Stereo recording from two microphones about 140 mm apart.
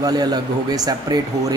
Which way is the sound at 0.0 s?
30° right (ahead or behind).